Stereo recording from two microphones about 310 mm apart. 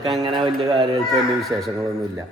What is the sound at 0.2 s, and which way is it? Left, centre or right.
Speech, centre.